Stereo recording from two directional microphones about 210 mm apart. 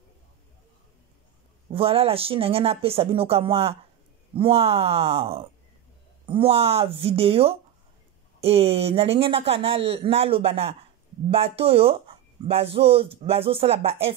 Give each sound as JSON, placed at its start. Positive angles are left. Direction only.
{"t": 1.7, "sound": "speech", "side_deg": -25}